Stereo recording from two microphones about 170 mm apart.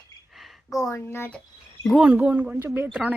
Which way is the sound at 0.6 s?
20° left (ahead or behind).